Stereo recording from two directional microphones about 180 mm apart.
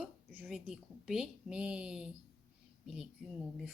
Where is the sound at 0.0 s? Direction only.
5° right (ahead or behind).